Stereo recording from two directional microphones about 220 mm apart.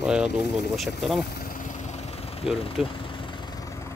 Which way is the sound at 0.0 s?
5° right (ahead or behind).